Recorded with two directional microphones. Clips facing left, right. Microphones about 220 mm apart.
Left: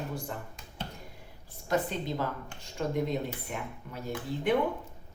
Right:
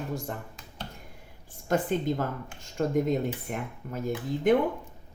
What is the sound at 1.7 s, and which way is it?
A woman's voice, 50° right (ahead or behind).